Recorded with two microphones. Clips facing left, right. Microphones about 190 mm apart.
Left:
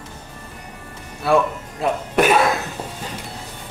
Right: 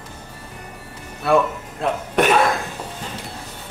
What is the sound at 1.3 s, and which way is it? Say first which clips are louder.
Speech: even; centre (ahead or behind).